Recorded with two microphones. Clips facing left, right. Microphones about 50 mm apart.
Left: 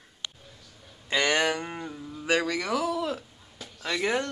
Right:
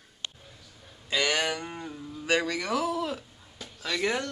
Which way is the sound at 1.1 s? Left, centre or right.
Left.